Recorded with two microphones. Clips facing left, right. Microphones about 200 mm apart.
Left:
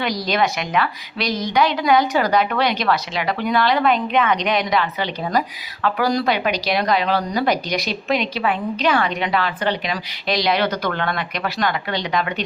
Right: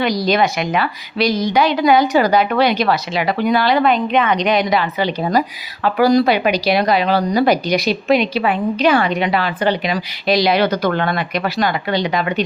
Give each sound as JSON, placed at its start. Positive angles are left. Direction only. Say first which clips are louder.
{"t": 0.0, "sound": "speech", "louder": "right 5 dB", "side_deg": 0}